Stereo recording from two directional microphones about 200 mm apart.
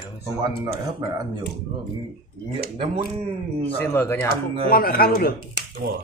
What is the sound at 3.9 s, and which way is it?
Speech, 10° left (ahead or behind).